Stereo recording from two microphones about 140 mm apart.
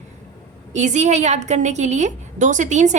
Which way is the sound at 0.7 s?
55° right (ahead or behind).